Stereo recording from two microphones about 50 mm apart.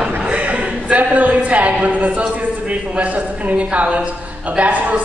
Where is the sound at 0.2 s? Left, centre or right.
Right.